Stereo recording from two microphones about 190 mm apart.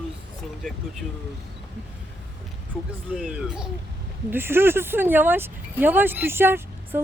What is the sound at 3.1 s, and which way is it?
Speech, 5° right (ahead or behind).